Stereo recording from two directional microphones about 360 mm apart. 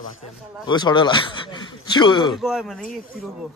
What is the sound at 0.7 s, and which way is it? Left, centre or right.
Speech, centre.